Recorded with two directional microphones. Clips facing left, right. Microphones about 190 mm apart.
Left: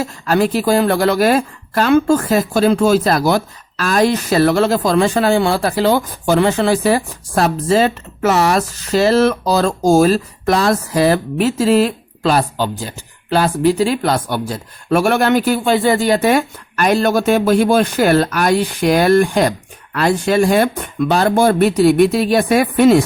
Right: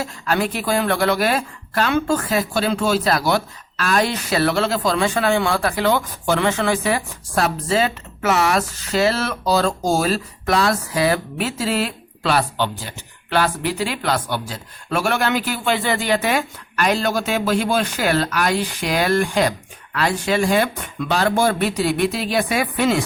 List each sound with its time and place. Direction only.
0.0 s speech: 40° left (ahead or behind)